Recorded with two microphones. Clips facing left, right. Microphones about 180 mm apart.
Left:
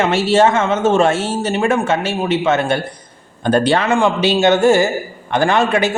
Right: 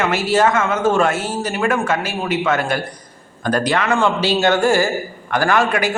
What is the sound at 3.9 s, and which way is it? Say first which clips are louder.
Speech: left 3 dB; 15° left (ahead or behind).